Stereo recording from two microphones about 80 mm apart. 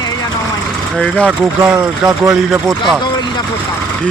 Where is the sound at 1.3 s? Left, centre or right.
Centre.